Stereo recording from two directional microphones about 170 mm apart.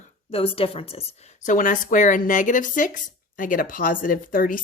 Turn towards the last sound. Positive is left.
turn(degrees=55)  # may be behind; listen again after turning